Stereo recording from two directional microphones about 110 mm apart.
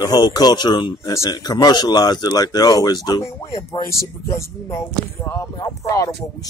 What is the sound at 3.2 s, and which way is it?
Speech, 25° left (ahead or behind).